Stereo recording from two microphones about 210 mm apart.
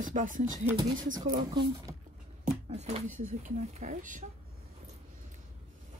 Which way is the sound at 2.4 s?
35° right (ahead or behind).